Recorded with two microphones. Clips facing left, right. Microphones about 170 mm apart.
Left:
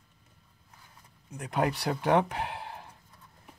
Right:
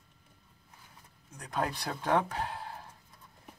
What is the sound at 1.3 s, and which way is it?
Speech, 20° left (ahead or behind).